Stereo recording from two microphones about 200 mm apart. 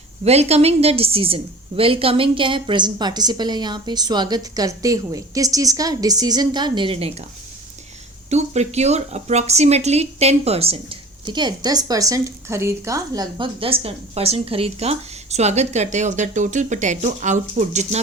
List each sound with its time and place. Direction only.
0.3 s a woman's voice: 30° right (ahead or behind)
8.3 s speech: 35° right (ahead or behind)